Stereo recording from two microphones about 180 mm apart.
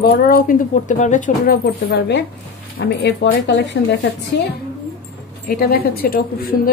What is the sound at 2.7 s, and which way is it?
Speech, 65° left (ahead or behind).